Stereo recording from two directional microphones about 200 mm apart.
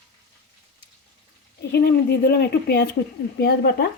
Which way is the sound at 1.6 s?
55° left (ahead or behind).